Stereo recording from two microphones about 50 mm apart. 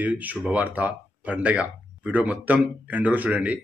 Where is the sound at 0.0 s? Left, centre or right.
Right.